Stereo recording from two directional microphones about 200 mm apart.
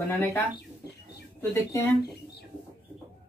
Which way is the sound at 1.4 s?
10° left (ahead or behind).